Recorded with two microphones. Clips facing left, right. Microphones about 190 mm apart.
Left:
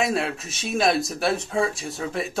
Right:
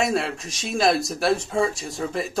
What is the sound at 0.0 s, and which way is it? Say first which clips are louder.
Speech: right 1 dB; centre (ahead or behind).